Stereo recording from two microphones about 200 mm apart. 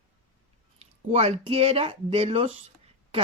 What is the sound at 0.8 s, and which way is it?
Speech, 30° right (ahead or behind).